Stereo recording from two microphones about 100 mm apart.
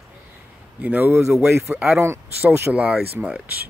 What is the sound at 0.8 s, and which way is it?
Speech, 15° right (ahead or behind).